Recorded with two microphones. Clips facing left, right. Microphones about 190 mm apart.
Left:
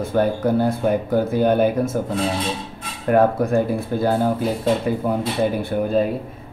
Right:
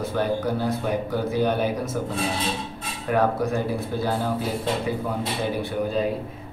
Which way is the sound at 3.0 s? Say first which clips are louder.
Left 6 dB; 50° left (ahead or behind).